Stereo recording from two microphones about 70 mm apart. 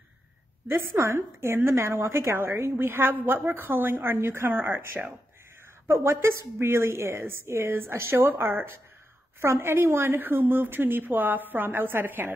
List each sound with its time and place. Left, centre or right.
0.7 s a woman's voice: right
9.4 s a woman's voice: right